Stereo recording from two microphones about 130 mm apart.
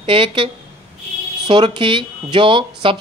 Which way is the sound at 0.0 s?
45° right (ahead or behind).